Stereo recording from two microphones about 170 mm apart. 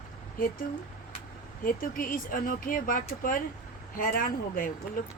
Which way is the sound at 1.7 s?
55° left (ahead or behind).